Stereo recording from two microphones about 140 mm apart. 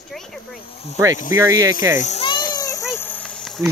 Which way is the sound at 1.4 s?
25° right (ahead or behind).